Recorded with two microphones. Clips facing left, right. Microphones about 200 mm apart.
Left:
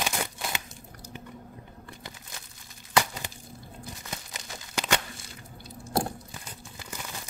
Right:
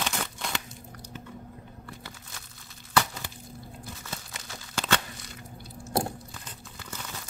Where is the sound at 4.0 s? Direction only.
15° left (ahead or behind).